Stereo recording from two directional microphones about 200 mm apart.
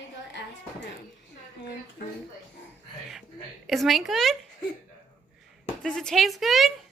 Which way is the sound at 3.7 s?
Centre (ahead or behind).